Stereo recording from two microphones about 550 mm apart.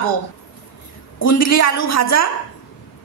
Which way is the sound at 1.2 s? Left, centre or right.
Left.